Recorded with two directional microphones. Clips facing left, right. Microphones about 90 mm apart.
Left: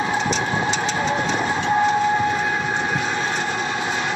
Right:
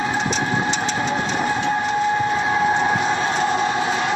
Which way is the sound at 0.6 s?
35° left (ahead or behind).